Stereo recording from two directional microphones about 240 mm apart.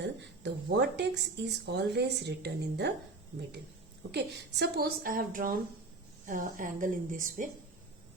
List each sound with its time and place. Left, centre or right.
0.2 s speech: right
4.1 s a woman's voice: right